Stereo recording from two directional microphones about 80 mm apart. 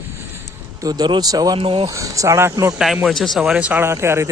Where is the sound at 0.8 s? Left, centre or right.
Right.